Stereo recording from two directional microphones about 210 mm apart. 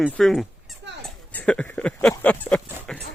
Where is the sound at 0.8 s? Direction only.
55° right (ahead or behind).